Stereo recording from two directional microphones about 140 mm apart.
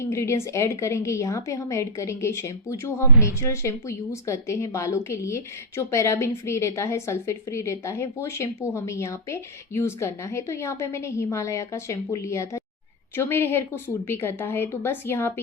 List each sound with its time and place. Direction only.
0.0 s a woman's voice: 20° left (ahead or behind)